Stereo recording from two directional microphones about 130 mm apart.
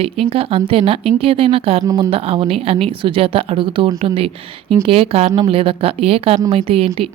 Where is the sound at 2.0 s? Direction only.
45° right (ahead or behind).